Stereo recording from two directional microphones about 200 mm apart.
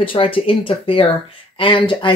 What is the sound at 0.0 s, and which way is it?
Speech, 25° left (ahead or behind).